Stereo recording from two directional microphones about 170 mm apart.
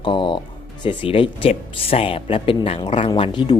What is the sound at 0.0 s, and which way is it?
Speech, 30° left (ahead or behind).